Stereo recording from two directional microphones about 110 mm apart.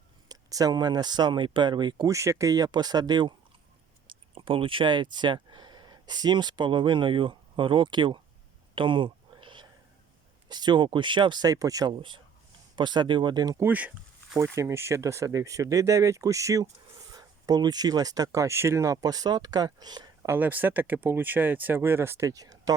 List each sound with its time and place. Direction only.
0.3 s speech: 35° right (ahead or behind)
2.0 s speech: 30° right (ahead or behind); by 8.2 s 45° right (ahead or behind)
8.7 s a sound: 50° right (ahead or behind)
10.5 s speech: 40° right (ahead or behind)
11.9 s speech: 45° right (ahead or behind)
13.6 s speech: 15° right (ahead or behind)
14.3 s speech: 25° right (ahead or behind)
20.2 s speech: 20° right (ahead or behind)